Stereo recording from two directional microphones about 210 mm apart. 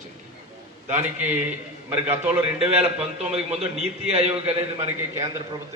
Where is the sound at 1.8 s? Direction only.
10° right (ahead or behind).